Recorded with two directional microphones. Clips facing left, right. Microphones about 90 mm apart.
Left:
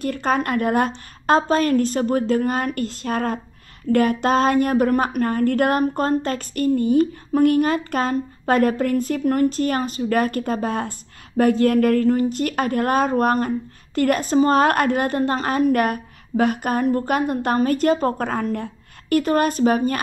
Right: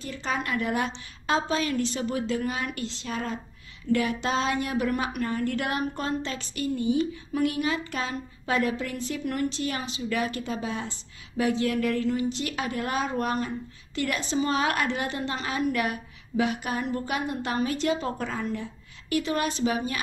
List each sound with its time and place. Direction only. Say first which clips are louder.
0.0 s speech: left 9 dB; 55° left (ahead or behind)